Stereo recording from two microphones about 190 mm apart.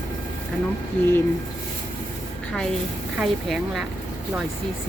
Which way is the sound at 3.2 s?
Centre (ahead or behind).